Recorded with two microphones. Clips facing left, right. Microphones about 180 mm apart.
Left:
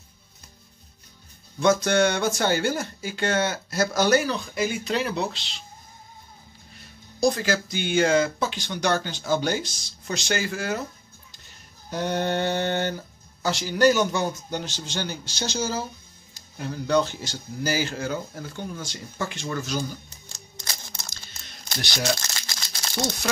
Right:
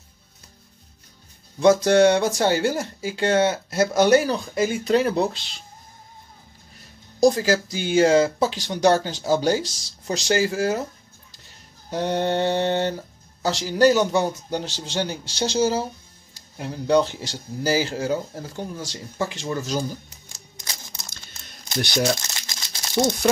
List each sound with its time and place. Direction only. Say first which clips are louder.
1.6 s speech: right 5 dB; 30° right (ahead or behind); by 5.6 s 50° right (ahead or behind)
7.2 s speech: right 5 dB; 35° right (ahead or behind)
11.9 s speech: right 3 dB; 30° right (ahead or behind)
22.2 s crumpling: left 1 dB; 20° right (ahead or behind)